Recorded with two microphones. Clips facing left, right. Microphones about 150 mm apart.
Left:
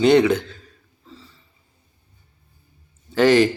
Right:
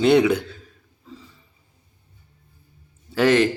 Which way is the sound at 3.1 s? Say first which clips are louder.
Left 2 dB; 5° right (ahead or behind).